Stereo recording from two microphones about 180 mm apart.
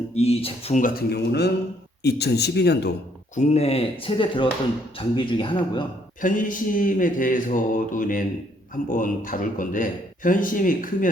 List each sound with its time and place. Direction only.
0.1 s speech: 35° left (ahead or behind); by 2.9 s 65° left (ahead or behind)
3.3 s speech: 40° left (ahead or behind)
6.2 s speech: 50° left (ahead or behind)